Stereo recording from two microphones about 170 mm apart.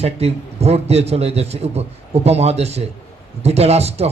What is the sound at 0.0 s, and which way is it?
A man's voice, 40° right (ahead or behind).